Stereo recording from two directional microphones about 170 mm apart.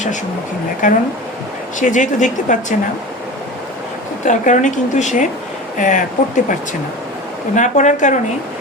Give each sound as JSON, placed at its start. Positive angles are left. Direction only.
{"t": 0.8, "sound": "a woman's voice", "side_deg": 50}
{"t": 4.3, "sound": "a woman's voice", "side_deg": 45}